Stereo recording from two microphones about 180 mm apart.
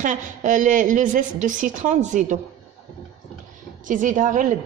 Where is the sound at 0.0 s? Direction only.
45° right (ahead or behind).